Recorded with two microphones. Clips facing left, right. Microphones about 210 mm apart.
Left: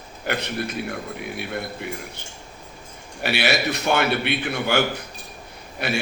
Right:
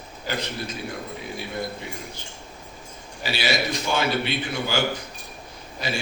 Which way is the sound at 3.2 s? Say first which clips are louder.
Left 3 dB; 65° left (ahead or behind).